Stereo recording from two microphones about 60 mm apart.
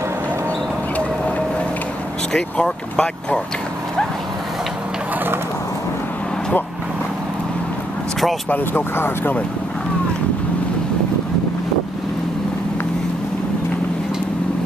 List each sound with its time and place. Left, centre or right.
2.3 s speech: centre
8.5 s speech: left